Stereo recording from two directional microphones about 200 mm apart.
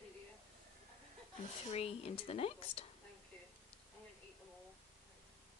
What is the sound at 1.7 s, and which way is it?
Speech, 30° left (ahead or behind).